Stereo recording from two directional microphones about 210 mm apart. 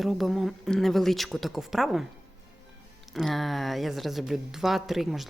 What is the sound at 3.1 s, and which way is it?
Speech, centre (ahead or behind).